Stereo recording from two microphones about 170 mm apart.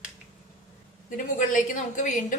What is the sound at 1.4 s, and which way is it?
Speech, 50° left (ahead or behind).